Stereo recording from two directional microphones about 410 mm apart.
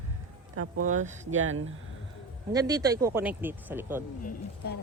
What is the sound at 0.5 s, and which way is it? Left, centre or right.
Speech, right.